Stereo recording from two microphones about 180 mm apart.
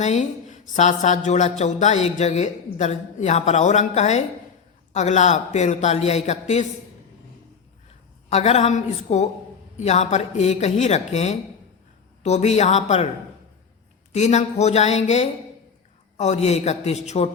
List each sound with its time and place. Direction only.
0.0 s speech: 40° left (ahead or behind)
8.3 s speech: 40° left (ahead or behind)
14.1 s speech: 40° left (ahead or behind)